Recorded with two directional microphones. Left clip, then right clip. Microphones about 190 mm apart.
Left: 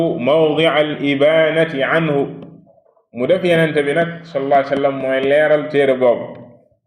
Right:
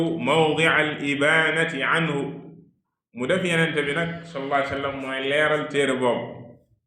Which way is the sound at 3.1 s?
30° left (ahead or behind).